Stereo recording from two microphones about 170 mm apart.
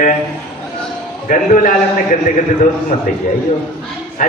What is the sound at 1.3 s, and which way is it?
Speech, 50° left (ahead or behind).